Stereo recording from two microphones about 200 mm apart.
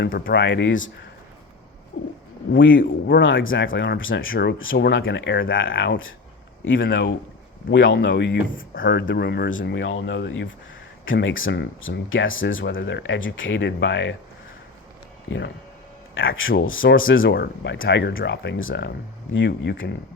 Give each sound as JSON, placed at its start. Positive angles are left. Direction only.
{"t": 0.0, "sound": "speech", "side_deg": 55}
{"t": 0.4, "sound": "speech", "side_deg": 65}
{"t": 2.5, "sound": "speech", "side_deg": 65}
{"t": 2.7, "sound": "speech", "side_deg": 45}
{"t": 3.2, "sound": "speech", "side_deg": 70}
{"t": 9.6, "sound": "speech", "side_deg": 70}
{"t": 15.3, "sound": "speech", "side_deg": 65}
{"t": 16.1, "sound": "speech", "side_deg": 80}
{"t": 17.3, "sound": "speech", "side_deg": 55}